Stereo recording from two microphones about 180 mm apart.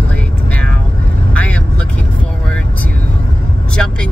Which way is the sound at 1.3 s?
5° left (ahead or behind).